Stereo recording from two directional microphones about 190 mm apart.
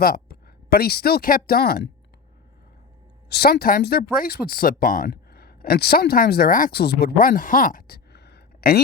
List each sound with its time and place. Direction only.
0.0 s speech: 50° left (ahead or behind)
3.2 s speech: 60° left (ahead or behind)